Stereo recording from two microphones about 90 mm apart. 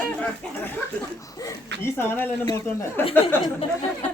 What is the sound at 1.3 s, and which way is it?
Chuckle, 40° left (ahead or behind).